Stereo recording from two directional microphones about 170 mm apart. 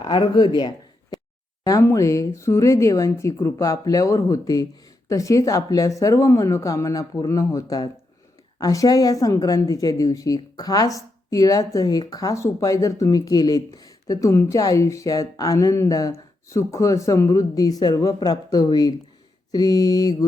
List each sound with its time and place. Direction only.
0.0 s a woman's voice: 25° left (ahead or behind)